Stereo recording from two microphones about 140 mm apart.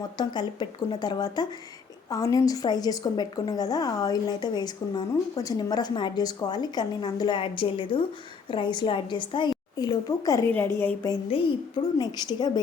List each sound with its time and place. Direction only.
0.2 s a woman's voice: 30° left (ahead or behind)
10.8 s speech: 15° left (ahead or behind)
11.9 s a woman's voice: 30° left (ahead or behind)